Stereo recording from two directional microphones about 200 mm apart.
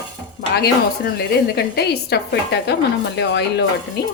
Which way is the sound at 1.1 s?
55° left (ahead or behind).